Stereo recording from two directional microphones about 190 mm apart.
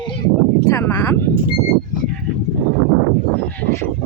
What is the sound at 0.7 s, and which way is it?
Speech, 20° left (ahead or behind).